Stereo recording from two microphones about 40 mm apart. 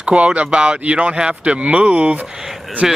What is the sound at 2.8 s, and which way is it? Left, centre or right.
Speech, centre.